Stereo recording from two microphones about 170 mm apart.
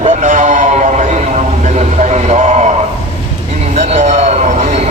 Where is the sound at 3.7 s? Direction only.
45° right (ahead or behind).